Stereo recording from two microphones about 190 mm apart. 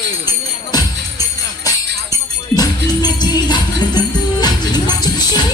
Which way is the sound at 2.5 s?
20° left (ahead or behind).